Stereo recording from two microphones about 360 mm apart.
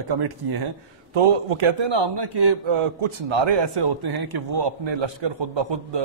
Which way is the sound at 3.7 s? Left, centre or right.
Right.